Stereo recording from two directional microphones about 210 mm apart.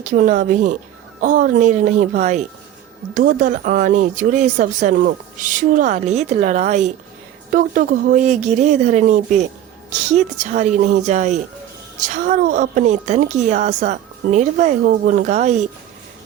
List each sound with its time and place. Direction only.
0.0 s speech: 40° right (ahead or behind)